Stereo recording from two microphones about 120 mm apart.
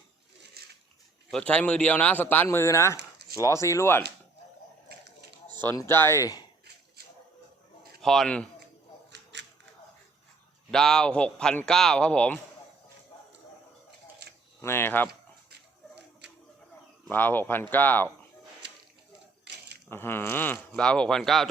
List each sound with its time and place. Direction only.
1.3 s speech: 10° left (ahead or behind)
5.7 s speech: 20° left (ahead or behind)
8.0 s speech: 5° left (ahead or behind)
10.7 s speech: 5° left (ahead or behind)
14.6 s speech: 20° left (ahead or behind)
17.1 s speech: 15° left (ahead or behind)
19.9 s speech: 20° left (ahead or behind); by 21.5 s centre (ahead or behind)